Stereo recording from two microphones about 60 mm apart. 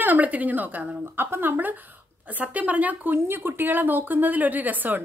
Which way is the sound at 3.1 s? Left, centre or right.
Right.